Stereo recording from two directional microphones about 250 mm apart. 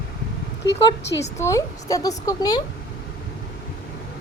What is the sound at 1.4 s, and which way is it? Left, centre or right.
Speech, centre.